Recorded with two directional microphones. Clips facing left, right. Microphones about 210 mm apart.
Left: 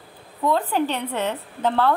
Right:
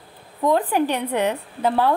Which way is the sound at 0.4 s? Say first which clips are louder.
Right 2 dB; 15° right (ahead or behind).